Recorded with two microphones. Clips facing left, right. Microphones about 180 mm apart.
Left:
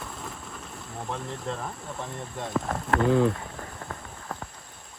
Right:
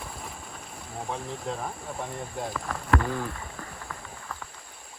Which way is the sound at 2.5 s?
20° left (ahead or behind).